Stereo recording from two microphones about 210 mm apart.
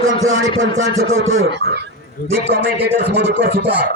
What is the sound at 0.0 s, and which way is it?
A man's voice, 70° right (ahead or behind).